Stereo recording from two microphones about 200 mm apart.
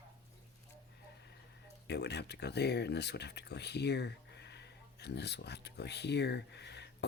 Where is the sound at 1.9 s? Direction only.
55° left (ahead or behind).